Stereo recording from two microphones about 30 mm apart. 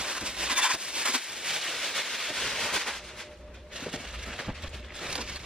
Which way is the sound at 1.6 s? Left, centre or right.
Centre.